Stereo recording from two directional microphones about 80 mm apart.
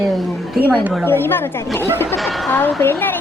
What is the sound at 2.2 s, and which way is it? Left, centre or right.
Speech, centre.